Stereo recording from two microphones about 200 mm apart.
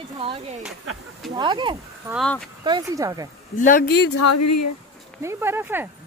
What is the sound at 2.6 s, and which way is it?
Speech, 20° right (ahead or behind).